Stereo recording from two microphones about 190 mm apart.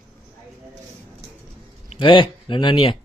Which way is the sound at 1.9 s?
25° left (ahead or behind).